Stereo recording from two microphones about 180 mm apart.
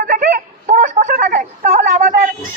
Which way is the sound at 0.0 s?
50° right (ahead or behind).